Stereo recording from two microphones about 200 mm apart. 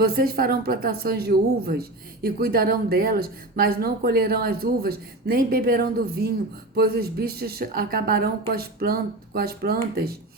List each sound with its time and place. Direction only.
0.0 s speech: 50° right (ahead or behind)